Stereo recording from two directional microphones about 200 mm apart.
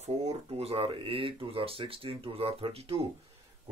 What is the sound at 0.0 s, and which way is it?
Speech, 30° right (ahead or behind).